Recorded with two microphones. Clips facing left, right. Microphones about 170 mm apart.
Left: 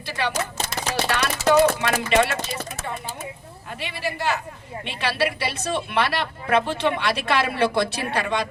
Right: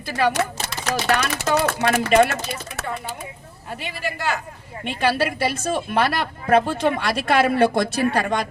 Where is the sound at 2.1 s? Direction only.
45° right (ahead or behind).